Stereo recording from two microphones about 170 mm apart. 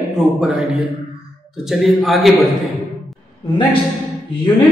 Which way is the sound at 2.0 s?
Centre (ahead or behind).